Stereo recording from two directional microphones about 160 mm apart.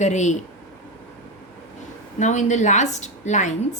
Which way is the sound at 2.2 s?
50° left (ahead or behind).